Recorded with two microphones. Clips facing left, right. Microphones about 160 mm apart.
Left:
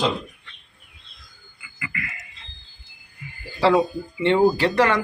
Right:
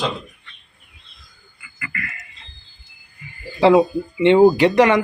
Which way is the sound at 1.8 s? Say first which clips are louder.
Right 1 dB; 20° left (ahead or behind).